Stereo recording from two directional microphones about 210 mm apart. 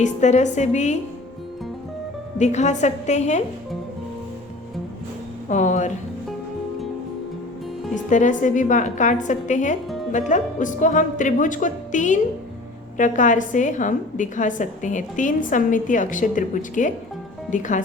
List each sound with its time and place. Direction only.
0.0 s a woman's voice: 35° left (ahead or behind)
2.4 s a woman's voice: 35° left (ahead or behind)
5.5 s a woman's voice: 35° left (ahead or behind)
8.1 s a woman's voice: 35° left (ahead or behind)